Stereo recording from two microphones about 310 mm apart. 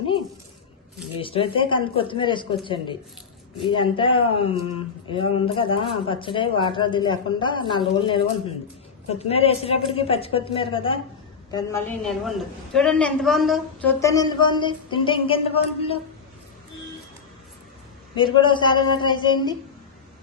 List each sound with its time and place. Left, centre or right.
1.1 s a woman's voice: centre
18.1 s a woman's voice: centre